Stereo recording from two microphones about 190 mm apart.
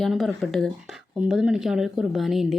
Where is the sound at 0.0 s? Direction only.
Centre (ahead or behind).